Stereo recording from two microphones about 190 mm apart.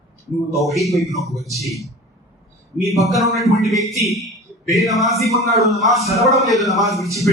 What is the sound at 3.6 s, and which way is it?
Speech, centre (ahead or behind).